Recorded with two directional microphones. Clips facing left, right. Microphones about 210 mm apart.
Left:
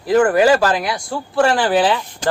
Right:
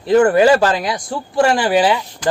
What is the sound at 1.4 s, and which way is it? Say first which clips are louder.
Speech: right 1 dB; 15° right (ahead or behind).